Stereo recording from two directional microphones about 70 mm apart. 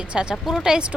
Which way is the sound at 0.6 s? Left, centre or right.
Centre.